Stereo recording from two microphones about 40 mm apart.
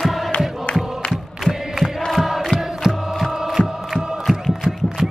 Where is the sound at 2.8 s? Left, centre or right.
Centre.